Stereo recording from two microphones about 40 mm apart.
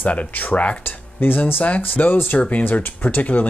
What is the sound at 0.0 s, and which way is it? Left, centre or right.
Speech, left.